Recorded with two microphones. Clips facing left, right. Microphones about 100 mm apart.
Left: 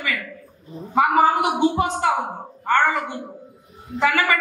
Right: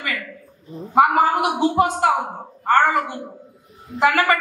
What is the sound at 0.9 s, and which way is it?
Speech, 60° right (ahead or behind).